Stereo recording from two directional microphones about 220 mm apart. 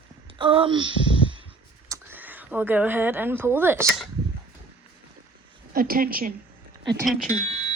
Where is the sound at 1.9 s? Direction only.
10° right (ahead or behind).